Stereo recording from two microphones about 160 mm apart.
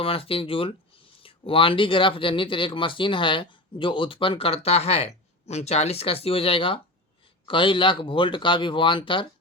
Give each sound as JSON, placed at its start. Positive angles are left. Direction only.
{"t": 0.0, "sound": "speech", "side_deg": 35}